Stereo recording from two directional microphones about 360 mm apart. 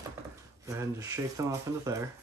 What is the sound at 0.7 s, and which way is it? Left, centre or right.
Speech, centre.